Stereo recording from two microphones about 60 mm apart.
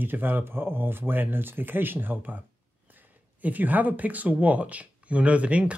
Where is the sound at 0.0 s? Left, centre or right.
Right.